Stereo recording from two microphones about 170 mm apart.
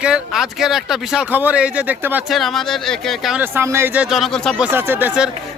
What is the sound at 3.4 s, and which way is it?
Speech, 15° right (ahead or behind).